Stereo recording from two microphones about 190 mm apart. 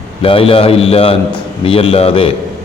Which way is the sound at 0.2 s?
30° left (ahead or behind).